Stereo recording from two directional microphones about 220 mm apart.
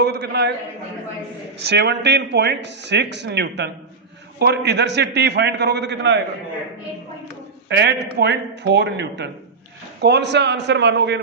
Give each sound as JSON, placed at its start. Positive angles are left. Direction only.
{"t": 0.0, "sound": "speech", "side_deg": -50}
{"t": 1.6, "sound": "speech", "side_deg": -50}
{"t": 7.7, "sound": "speech", "side_deg": -50}